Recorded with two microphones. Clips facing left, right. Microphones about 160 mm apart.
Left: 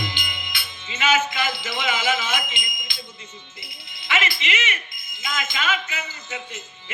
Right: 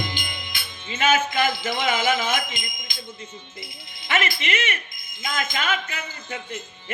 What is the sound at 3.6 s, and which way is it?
A man's voice, 50° right (ahead or behind).